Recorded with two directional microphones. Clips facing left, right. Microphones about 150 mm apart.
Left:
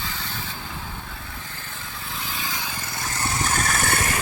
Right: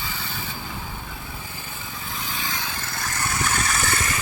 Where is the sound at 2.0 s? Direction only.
Centre (ahead or behind); by 3.5 s 25° left (ahead or behind).